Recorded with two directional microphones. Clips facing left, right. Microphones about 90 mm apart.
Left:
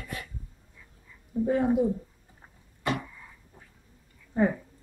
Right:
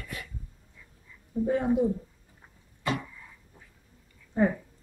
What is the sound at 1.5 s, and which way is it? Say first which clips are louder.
Speech: left 1 dB; 20° left (ahead or behind).